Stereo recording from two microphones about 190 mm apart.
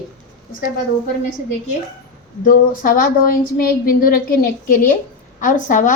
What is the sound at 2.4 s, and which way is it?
A woman's voice, 45° left (ahead or behind).